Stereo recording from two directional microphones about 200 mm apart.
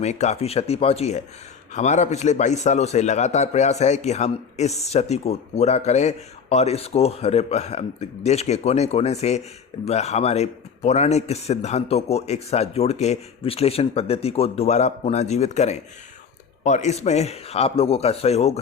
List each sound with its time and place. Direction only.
0.0 s a man's voice: 35° left (ahead or behind)